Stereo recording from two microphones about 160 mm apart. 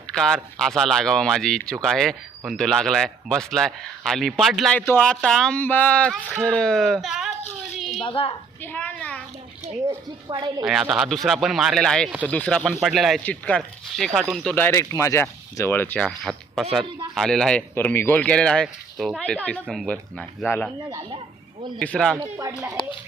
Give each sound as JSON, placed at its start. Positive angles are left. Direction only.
{"t": 0.1, "sound": "speech", "side_deg": 0}
{"t": 7.8, "sound": "a sound", "side_deg": 0}
{"t": 8.0, "sound": "a woman's voice", "side_deg": 35}
{"t": 8.6, "sound": "speech", "side_deg": 10}
{"t": 10.2, "sound": "a woman's voice", "side_deg": -30}
{"t": 10.7, "sound": "speech", "side_deg": 0}
{"t": 14.5, "sound": "speech", "side_deg": 15}
{"t": 21.8, "sound": "speech", "side_deg": 5}
{"t": 22.2, "sound": "a woman's voice", "side_deg": -20}